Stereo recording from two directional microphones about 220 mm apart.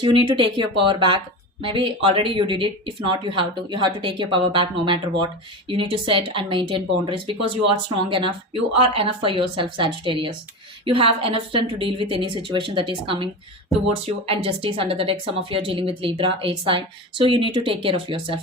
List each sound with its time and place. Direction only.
0.0 s a woman's voice: 20° right (ahead or behind)